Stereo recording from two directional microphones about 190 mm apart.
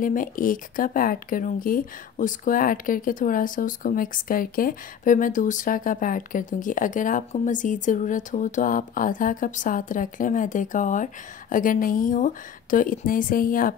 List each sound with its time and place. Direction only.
0.0 s speech: 45° left (ahead or behind)